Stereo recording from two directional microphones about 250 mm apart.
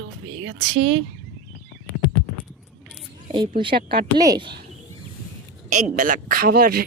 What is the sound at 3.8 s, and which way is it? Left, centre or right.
Speech, right.